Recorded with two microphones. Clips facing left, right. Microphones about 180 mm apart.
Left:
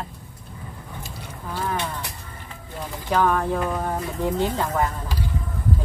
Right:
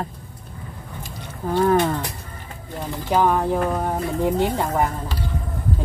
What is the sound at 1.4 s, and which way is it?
Speech, 50° right (ahead or behind).